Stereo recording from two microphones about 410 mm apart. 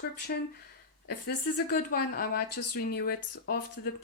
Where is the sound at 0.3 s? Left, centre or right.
Left.